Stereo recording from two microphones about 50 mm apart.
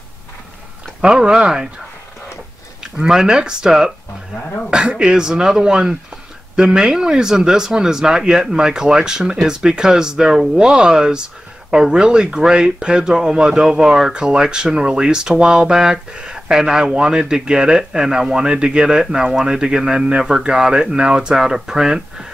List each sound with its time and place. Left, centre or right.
1.0 s speech: centre
2.8 s speech: centre